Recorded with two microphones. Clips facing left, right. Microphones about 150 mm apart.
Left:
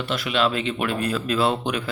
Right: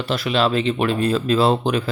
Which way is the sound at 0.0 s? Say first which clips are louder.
Right 3 dB; 35° right (ahead or behind).